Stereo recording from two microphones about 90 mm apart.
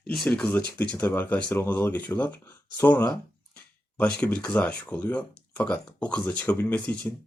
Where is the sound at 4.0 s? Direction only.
15° left (ahead or behind).